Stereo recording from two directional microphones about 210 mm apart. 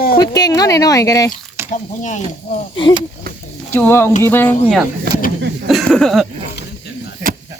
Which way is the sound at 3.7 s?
10° left (ahead or behind).